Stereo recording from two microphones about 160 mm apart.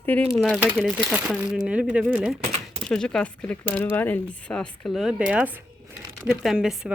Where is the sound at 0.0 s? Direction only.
10° left (ahead or behind).